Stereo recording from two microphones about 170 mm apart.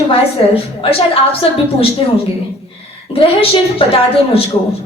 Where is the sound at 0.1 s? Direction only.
35° left (ahead or behind).